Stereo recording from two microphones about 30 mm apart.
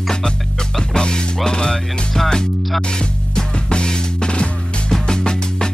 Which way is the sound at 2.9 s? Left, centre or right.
Left.